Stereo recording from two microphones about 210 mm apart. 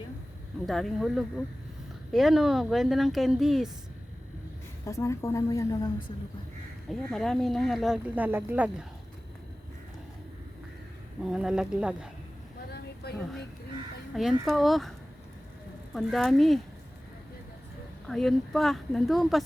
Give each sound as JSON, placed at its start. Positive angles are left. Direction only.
{"t": 0.6, "sound": "speech", "side_deg": 0}
{"t": 4.9, "sound": "a woman's voice", "side_deg": 15}
{"t": 7.1, "sound": "speech", "side_deg": 0}
{"t": 11.3, "sound": "speech", "side_deg": -5}
{"t": 13.0, "sound": "a woman's voice", "side_deg": 50}
{"t": 14.1, "sound": "speech", "side_deg": 0}
{"t": 16.0, "sound": "speech", "side_deg": 0}
{"t": 18.1, "sound": "speech", "side_deg": 0}